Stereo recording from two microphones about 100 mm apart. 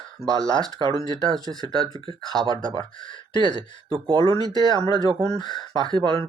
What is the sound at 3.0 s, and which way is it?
Speech, 55° left (ahead or behind).